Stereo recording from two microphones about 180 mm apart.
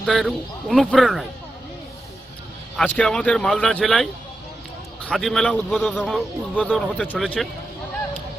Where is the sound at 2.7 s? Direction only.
5° left (ahead or behind).